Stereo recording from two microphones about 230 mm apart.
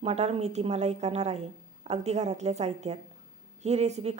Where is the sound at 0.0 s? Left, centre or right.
Right.